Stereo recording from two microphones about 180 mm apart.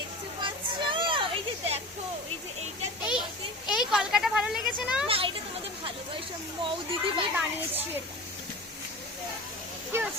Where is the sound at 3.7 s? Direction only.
5° right (ahead or behind).